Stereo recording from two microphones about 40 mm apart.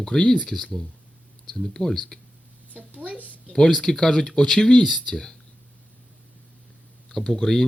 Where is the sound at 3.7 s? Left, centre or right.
Centre.